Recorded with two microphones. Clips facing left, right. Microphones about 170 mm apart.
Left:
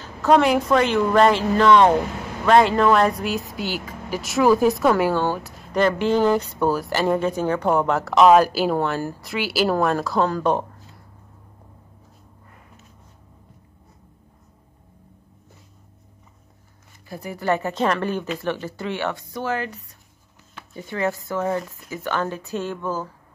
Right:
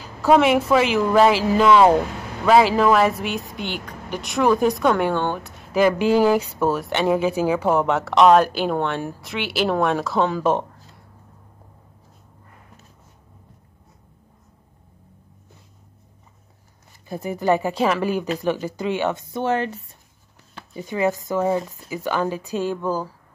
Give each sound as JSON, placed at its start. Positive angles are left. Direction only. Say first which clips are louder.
{"t": 0.0, "sound": "a woman's voice", "louder": "right 1 dB", "side_deg": -5}
{"t": 17.1, "sound": "speech", "louder": "right 3 dB", "side_deg": -20}